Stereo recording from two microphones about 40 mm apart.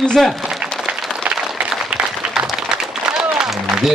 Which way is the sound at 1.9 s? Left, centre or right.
Right.